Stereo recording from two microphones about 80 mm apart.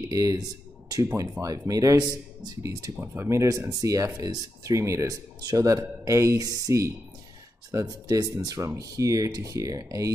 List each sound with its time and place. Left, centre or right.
0.1 s speech: right
3.0 s speech: right